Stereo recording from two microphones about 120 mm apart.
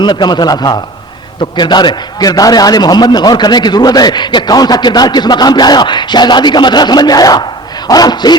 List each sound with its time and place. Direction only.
0.0 s a man's voice: 35° left (ahead or behind)